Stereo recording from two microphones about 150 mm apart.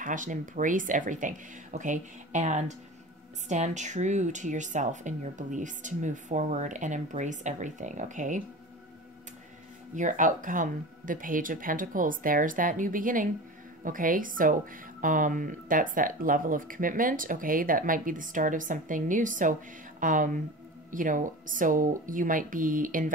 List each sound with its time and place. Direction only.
0.0 s speech: 60° right (ahead or behind)
9.9 s speech: 60° right (ahead or behind)